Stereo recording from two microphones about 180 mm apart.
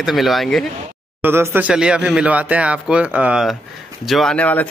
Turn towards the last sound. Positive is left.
turn(degrees=10)  # may be behind; listen again after turning